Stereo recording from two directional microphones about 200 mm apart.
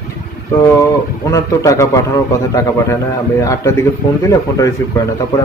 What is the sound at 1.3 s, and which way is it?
Speech, 15° left (ahead or behind).